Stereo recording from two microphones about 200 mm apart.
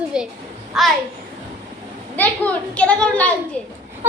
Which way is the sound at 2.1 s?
10° left (ahead or behind).